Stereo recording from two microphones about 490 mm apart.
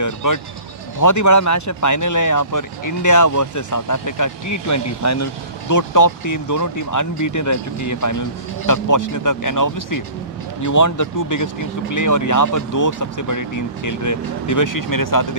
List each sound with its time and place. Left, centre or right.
0.0 s speech: left